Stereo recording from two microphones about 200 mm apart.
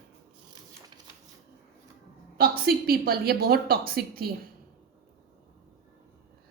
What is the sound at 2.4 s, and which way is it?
A woman's voice, 50° right (ahead or behind).